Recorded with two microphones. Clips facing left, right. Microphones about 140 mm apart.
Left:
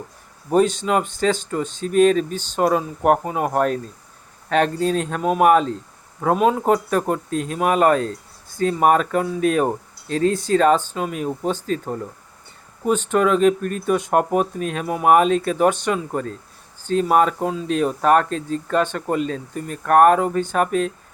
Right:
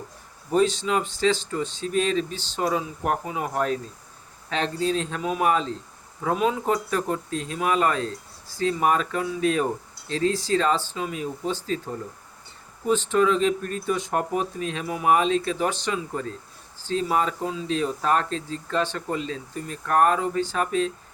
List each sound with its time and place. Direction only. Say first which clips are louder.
0.5 s speech: left 4 dB; 50° left (ahead or behind)
13.1 s speech: left 5 dB; 55° left (ahead or behind)